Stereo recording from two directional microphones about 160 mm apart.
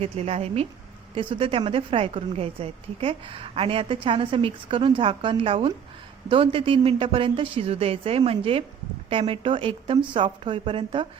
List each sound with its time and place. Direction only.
0.0 s a woman's voice: 40° right (ahead or behind)